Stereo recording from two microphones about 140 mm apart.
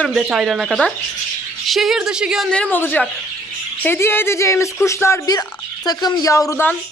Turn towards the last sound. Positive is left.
turn(degrees=25)  # may be behind; listen again after turning